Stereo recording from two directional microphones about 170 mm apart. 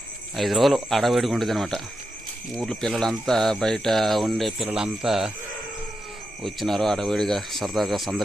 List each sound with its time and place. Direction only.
0.3 s speech: centre (ahead or behind)
6.4 s speech: centre (ahead or behind)